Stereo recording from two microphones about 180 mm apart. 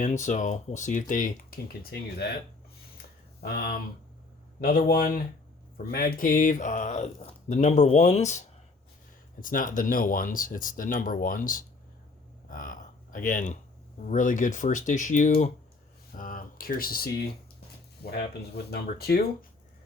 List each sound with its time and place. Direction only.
0.0 s speech: 45° left (ahead or behind); by 2.3 s 60° left (ahead or behind)
3.4 s speech: 55° left (ahead or behind)
12.5 s a sound: 50° left (ahead or behind)
14.1 s speech: 45° left (ahead or behind)